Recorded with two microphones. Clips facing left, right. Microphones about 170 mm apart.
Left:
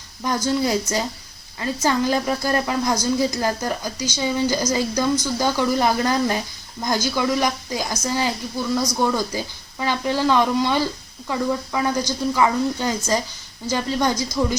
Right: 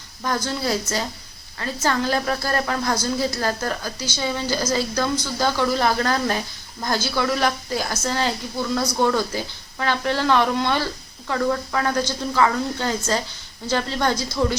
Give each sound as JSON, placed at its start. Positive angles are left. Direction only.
{"t": 0.2, "sound": "a woman's voice", "side_deg": 15}